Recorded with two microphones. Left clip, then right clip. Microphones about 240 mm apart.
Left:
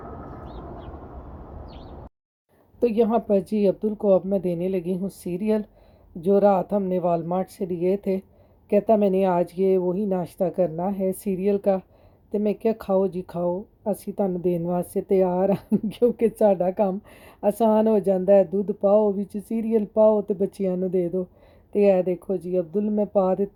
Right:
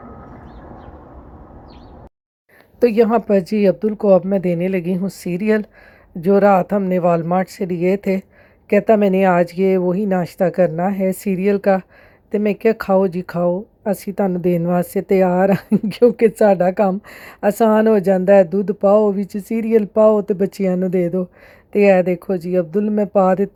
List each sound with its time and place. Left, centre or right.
2.8 s speech: centre
3.5 s speech: right
3.9 s speech: centre
13.1 s speech: centre